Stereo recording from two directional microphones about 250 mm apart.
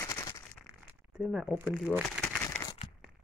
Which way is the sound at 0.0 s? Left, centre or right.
Centre.